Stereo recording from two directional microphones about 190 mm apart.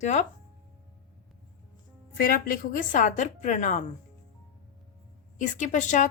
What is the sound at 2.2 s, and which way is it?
Speech, 50° left (ahead or behind).